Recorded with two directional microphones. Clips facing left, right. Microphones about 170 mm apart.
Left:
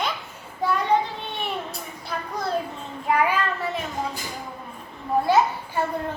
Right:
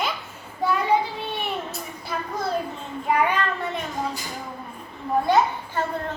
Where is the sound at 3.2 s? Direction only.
5° left (ahead or behind).